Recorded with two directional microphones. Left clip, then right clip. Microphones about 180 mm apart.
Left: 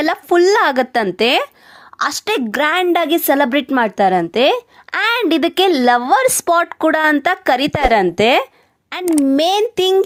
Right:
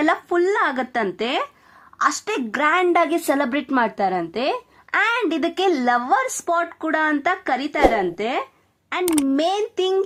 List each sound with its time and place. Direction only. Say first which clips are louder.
0.0 s a woman's voice: left 6 dB; 30° left (ahead or behind)